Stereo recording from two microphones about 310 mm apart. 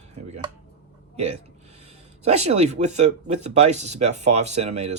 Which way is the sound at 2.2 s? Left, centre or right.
Right.